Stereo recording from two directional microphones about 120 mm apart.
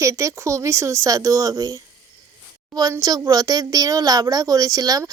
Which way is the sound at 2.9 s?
30° right (ahead or behind).